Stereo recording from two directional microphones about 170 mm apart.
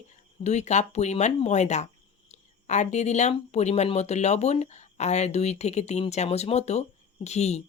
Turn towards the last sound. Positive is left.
turn(degrees=40)  # may be behind; listen again after turning